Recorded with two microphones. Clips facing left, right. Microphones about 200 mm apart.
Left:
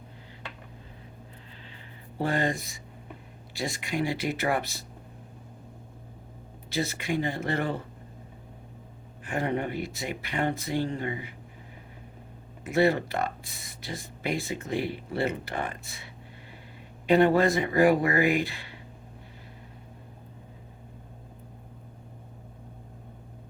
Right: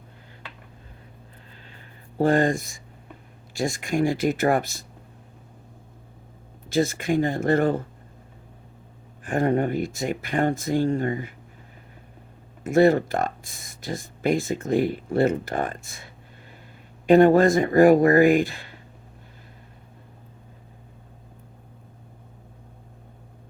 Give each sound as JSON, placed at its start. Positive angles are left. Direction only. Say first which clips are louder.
{"t": 2.1, "sound": "speech", "louder": "right 8 dB", "side_deg": -45}
{"t": 6.7, "sound": "speech", "louder": "right 7 dB", "side_deg": -45}
{"t": 9.2, "sound": "speech", "louder": "right 7 dB", "side_deg": -45}
{"t": 12.6, "sound": "speech", "louder": "right 6 dB", "side_deg": -45}
{"t": 17.1, "sound": "speech", "louder": "right 6 dB", "side_deg": -45}